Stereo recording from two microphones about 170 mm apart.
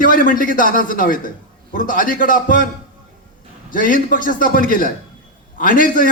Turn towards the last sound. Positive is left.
turn(degrees=55)  # may be behind; listen again after turning